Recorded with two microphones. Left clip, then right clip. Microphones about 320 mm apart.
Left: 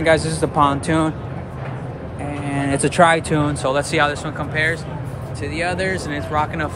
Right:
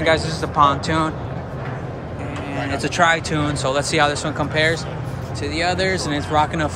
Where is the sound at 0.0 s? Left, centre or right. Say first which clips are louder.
Left 2 dB; centre.